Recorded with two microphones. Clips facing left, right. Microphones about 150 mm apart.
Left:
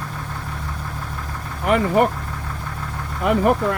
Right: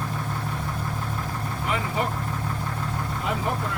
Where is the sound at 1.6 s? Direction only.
60° left (ahead or behind).